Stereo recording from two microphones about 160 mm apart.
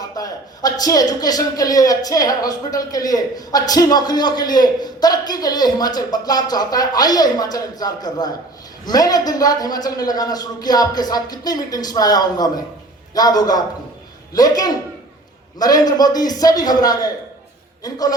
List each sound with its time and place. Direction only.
0.0 s speech: 25° left (ahead or behind)